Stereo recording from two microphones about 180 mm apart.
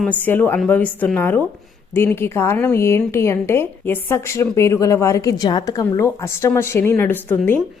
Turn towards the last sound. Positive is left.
turn(degrees=10)  # may be behind; listen again after turning